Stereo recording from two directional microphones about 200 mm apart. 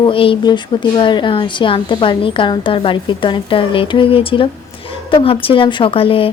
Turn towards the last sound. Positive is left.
turn(degrees=30)  # may be behind; listen again after turning